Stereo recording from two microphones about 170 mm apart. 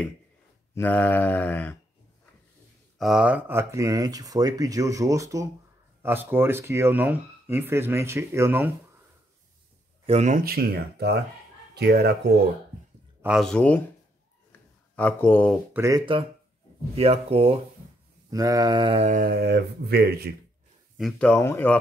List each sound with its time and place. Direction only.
0.7 s mantra: 10° left (ahead or behind)
3.0 s speech: 5° right (ahead or behind)
10.0 s speech: 40° right (ahead or behind)
10.4 s speech: 60° right (ahead or behind)
13.2 s speech: centre (ahead or behind)
15.0 s mantra: 10° left (ahead or behind)
15.7 s speech: 15° right (ahead or behind)
16.9 s speech: 35° right (ahead or behind)
18.3 s speech: 20° right (ahead or behind)
19.0 s speech: 55° right (ahead or behind); by 20.3 s 70° right (ahead or behind)
21.0 s mantra: 5° left (ahead or behind)